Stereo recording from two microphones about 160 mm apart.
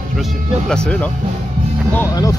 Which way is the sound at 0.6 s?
5° left (ahead or behind).